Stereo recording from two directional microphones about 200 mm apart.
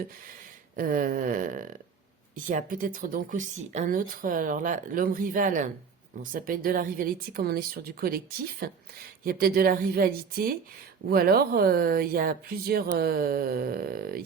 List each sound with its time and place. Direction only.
0.8 s speech: 45° right (ahead or behind)